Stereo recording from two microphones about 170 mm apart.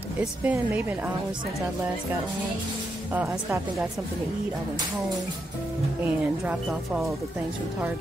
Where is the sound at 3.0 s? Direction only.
10° right (ahead or behind).